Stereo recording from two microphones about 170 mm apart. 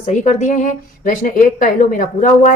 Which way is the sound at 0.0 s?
45° left (ahead or behind).